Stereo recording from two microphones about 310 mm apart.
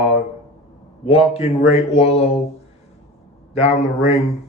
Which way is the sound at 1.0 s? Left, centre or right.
Centre.